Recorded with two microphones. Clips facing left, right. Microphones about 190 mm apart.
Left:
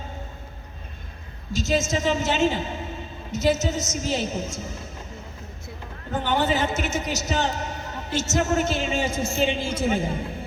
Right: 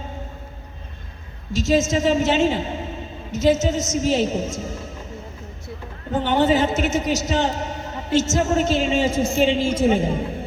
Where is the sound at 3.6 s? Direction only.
50° right (ahead or behind).